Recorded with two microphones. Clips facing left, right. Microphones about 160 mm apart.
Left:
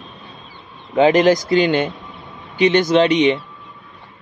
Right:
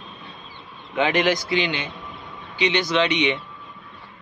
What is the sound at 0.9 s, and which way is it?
Speech, 40° left (ahead or behind).